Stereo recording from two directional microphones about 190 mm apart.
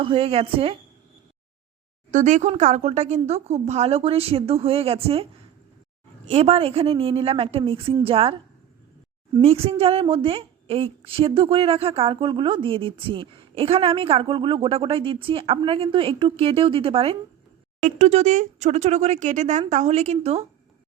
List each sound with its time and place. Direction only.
0.0 s speech: 30° right (ahead or behind)
2.0 s a woman's voice: 40° right (ahead or behind)
9.4 s a woman's voice: 30° right (ahead or behind)